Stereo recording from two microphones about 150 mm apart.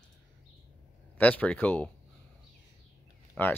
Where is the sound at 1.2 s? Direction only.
10° left (ahead or behind).